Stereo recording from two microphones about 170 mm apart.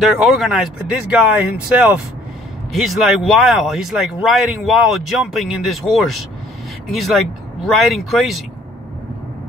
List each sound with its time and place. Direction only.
0.0 s speech: centre (ahead or behind)